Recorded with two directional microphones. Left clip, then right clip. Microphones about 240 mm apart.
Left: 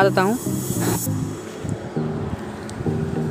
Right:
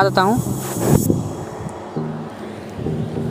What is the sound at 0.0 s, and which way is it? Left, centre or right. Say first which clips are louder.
Speech: right 2 dB; centre.